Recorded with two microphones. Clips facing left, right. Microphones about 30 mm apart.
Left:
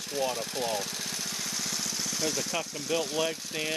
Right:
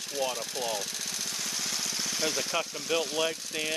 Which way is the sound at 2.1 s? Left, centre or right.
Centre.